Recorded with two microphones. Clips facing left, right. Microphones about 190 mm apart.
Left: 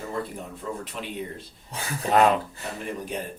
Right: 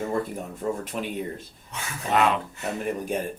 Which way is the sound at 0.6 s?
45° right (ahead or behind).